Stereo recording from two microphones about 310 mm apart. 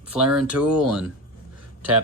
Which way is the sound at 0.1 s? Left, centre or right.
Centre.